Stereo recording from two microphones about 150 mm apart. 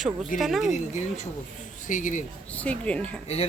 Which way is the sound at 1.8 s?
60° left (ahead or behind).